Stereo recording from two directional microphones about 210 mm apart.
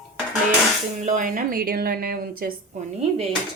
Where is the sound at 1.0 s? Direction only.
35° right (ahead or behind).